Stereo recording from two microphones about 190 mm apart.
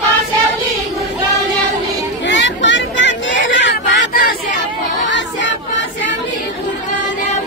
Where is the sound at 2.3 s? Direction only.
70° left (ahead or behind).